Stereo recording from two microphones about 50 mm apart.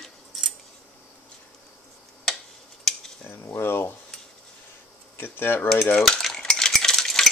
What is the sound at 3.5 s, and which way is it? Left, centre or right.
Speech, left.